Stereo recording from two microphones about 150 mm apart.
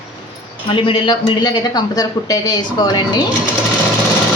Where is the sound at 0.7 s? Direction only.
35° left (ahead or behind).